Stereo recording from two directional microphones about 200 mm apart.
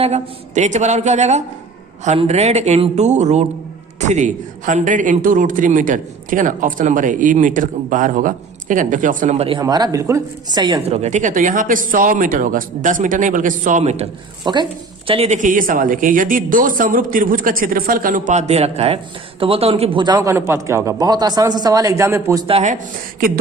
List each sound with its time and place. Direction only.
0.0 s a woman's voice: 35° right (ahead or behind)
9.6 s a woman's voice: 20° right (ahead or behind)
22.4 s a woman's voice: 35° right (ahead or behind)